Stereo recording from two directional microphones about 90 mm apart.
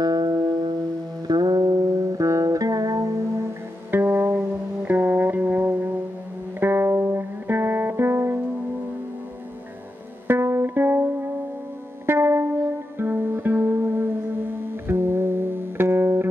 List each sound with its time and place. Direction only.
0.0 s music: 45° right (ahead or behind)
3.9 s music: 25° right (ahead or behind)
10.2 s music: 25° right (ahead or behind)